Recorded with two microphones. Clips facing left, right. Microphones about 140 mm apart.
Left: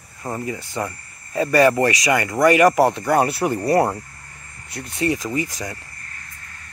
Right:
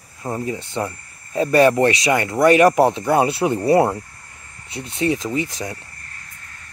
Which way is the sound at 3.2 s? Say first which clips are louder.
Right 3 dB; 25° right (ahead or behind).